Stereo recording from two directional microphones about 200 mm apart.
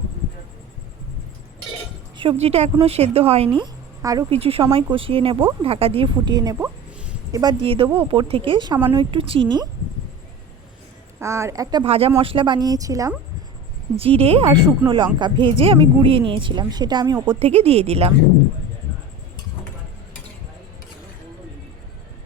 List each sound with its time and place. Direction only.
2.1 s speech: 30° right (ahead or behind)
4.3 s speech: 30° right (ahead or behind)
11.2 s speech: 15° right (ahead or behind)
13.9 s speech: 30° right (ahead or behind)